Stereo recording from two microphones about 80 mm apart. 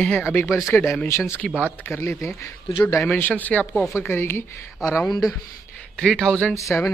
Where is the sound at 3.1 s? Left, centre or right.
Left.